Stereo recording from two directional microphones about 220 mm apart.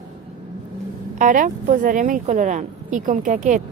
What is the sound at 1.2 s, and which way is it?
Speech, 35° right (ahead or behind).